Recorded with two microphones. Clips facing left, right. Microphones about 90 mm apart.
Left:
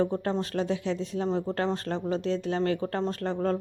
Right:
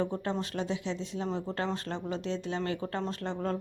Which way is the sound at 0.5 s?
45° left (ahead or behind).